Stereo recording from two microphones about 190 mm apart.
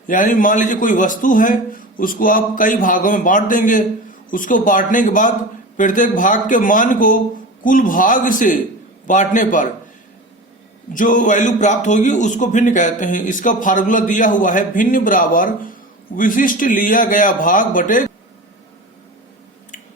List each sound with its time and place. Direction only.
0.1 s a man's voice: 45° left (ahead or behind)
10.9 s a man's voice: 45° left (ahead or behind)